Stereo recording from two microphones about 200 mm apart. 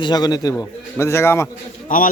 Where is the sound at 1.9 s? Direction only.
40° left (ahead or behind).